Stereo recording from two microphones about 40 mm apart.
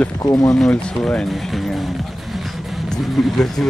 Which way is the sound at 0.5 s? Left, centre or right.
Centre.